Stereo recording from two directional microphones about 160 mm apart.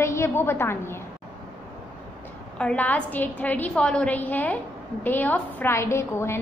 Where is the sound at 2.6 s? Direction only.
10° left (ahead or behind).